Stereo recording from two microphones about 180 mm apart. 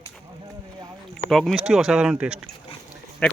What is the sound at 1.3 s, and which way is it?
Speech, centre (ahead or behind).